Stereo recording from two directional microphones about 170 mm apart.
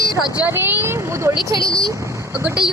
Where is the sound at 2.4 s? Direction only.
5° right (ahead or behind).